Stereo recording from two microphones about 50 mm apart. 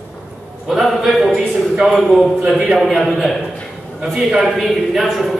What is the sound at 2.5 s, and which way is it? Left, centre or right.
Speech, centre.